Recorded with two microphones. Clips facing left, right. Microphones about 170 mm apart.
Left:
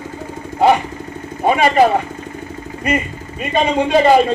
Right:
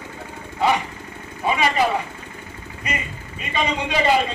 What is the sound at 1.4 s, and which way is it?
Speech, 50° left (ahead or behind).